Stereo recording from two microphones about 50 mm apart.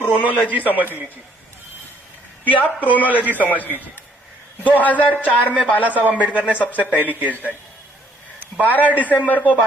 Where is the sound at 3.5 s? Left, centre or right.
Left.